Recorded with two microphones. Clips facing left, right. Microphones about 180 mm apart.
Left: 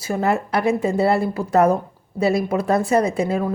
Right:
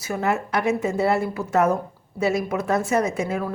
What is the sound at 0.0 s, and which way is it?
A woman's voice, 35° left (ahead or behind).